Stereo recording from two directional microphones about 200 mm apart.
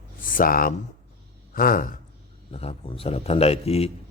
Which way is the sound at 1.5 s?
45° left (ahead or behind).